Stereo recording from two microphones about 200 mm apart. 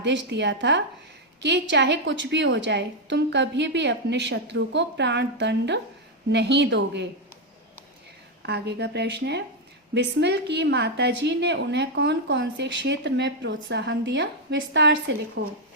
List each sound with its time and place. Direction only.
0.0 s a woman's voice: 60° right (ahead or behind)
8.4 s a woman's voice: 55° right (ahead or behind)